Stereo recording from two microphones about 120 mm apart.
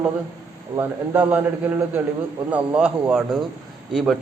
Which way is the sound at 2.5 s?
10° right (ahead or behind).